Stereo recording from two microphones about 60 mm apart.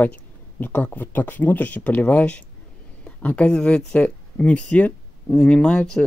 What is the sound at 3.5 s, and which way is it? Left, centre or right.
Speech, centre.